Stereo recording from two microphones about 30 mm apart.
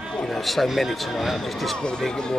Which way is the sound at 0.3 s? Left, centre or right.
Centre.